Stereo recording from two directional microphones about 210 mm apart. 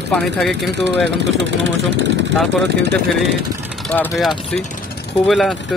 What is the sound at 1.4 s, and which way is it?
Speech, 60° right (ahead or behind).